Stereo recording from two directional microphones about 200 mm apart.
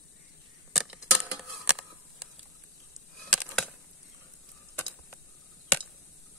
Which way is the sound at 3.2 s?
Centre (ahead or behind).